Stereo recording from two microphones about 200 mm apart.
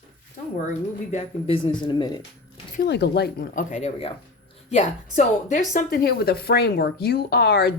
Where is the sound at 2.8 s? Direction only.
55° left (ahead or behind).